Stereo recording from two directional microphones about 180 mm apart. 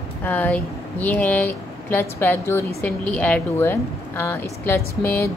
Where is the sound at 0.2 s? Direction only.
10° left (ahead or behind).